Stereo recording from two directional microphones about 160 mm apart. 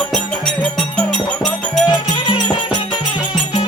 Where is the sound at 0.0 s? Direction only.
5° left (ahead or behind).